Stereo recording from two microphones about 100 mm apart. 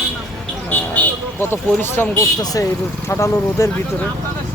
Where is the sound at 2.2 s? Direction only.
35° left (ahead or behind).